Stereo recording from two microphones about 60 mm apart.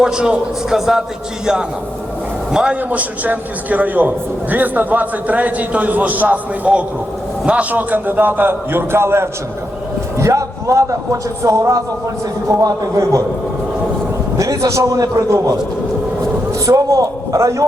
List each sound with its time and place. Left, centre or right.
0.0 s a man's voice: centre
2.5 s a man's voice: centre
2.9 s a man's voice: right
10.2 s a man's voice: right
14.3 s a man's voice: right
15.3 s a man's voice: right